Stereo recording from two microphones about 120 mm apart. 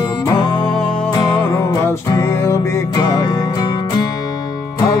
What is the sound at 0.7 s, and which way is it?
Music, 10° left (ahead or behind).